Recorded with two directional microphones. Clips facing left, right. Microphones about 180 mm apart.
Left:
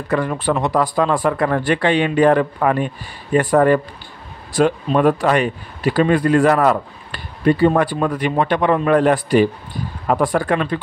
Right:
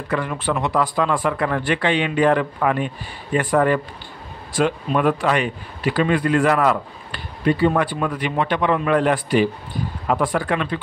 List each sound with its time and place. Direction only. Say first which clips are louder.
0.1 s speech: left 4 dB; 40° left (ahead or behind)